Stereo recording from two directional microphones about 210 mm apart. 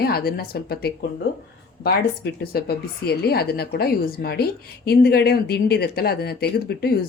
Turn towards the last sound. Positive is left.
turn(degrees=50)  # may be behind; listen again after turning